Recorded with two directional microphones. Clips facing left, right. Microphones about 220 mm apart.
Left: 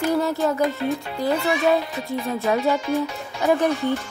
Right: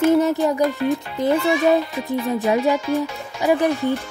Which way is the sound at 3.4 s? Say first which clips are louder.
Right 2 dB; 15° right (ahead or behind).